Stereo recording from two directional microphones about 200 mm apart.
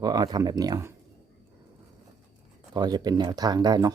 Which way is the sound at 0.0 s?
20° right (ahead or behind).